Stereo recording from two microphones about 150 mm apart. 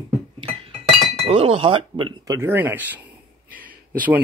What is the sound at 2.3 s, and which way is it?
Speech, 15° right (ahead or behind).